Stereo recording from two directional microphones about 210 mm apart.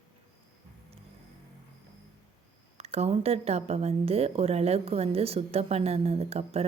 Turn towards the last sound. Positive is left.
turn(degrees=-30)  # may be behind; listen again after turning